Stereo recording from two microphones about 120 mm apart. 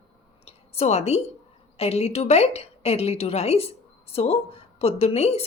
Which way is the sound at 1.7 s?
60° left (ahead or behind).